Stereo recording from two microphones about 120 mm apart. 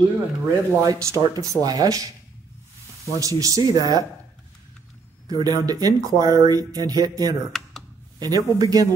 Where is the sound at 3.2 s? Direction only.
30° right (ahead or behind).